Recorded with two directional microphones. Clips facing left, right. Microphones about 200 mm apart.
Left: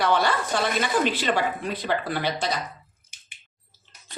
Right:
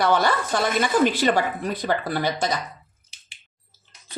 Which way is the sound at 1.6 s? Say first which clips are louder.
Right 2 dB; 45° right (ahead or behind).